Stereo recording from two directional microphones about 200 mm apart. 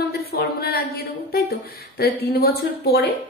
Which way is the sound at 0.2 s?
50° left (ahead or behind).